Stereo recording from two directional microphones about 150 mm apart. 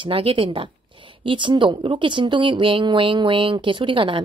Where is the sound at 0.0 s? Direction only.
35° right (ahead or behind).